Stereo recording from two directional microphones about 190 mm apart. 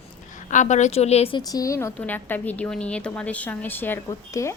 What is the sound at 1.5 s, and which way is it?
A woman's voice, 20° left (ahead or behind).